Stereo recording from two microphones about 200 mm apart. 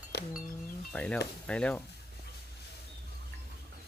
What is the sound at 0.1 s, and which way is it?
Chink, 55° left (ahead or behind).